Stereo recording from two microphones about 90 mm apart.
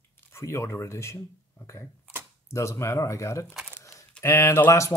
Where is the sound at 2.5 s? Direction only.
30° left (ahead or behind).